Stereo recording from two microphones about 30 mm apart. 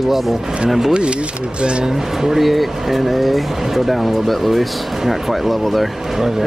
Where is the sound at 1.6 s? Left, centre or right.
Right.